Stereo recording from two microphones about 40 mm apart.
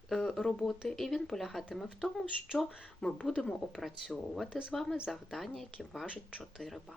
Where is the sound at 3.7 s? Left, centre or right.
Centre.